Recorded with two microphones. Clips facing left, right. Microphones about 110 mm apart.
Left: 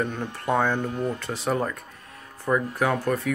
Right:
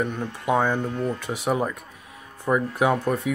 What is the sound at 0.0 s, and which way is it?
Speech, 10° right (ahead or behind).